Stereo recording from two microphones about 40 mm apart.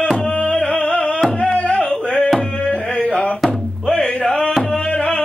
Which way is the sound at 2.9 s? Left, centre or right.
Left.